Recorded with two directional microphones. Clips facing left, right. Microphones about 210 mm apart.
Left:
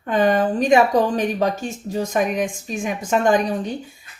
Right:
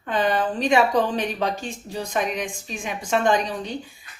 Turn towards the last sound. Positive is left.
turn(degrees=45)  # may be behind; listen again after turning